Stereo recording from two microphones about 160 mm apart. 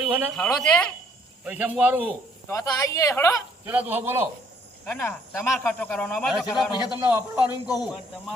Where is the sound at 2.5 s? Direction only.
20° left (ahead or behind).